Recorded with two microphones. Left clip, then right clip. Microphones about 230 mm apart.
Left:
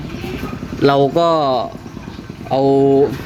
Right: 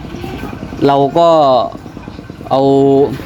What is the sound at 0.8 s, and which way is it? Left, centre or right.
Speech, centre.